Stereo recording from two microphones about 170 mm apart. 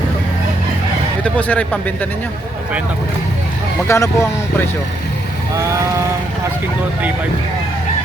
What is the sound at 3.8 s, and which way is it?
Speech, 15° left (ahead or behind).